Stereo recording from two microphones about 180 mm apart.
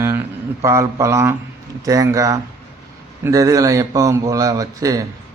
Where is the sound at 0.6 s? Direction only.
15° right (ahead or behind).